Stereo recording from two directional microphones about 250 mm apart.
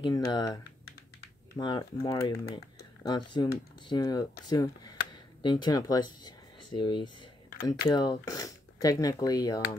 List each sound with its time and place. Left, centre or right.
0.0 s speech: centre
1.6 s speech: centre